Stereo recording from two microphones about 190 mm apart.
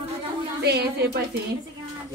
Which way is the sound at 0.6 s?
60° right (ahead or behind).